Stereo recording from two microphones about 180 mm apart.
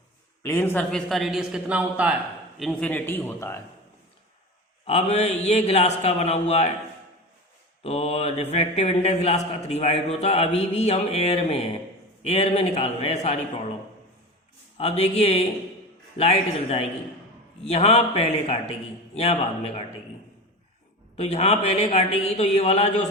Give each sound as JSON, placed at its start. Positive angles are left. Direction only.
{"t": 0.4, "sound": "a man's voice", "side_deg": 15}
{"t": 4.9, "sound": "a man's voice", "side_deg": 35}
{"t": 7.9, "sound": "a man's voice", "side_deg": 35}
{"t": 14.8, "sound": "a man's voice", "side_deg": 35}
{"t": 21.2, "sound": "a man's voice", "side_deg": 35}